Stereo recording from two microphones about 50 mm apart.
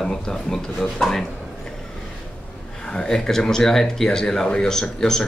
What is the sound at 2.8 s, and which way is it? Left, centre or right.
Speech, centre.